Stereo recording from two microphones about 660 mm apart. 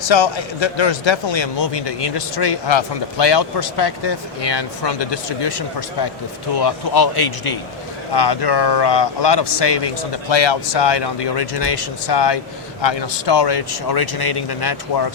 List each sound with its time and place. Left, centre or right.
0.0 s speech: left